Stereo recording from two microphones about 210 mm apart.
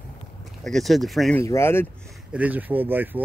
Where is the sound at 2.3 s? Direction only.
5° right (ahead or behind).